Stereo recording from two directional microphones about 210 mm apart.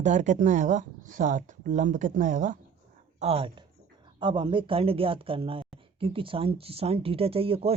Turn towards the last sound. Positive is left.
turn(degrees=-25)  # may be behind; listen again after turning